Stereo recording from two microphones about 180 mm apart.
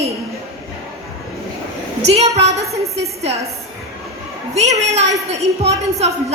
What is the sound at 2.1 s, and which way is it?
A woman's voice, 35° right (ahead or behind).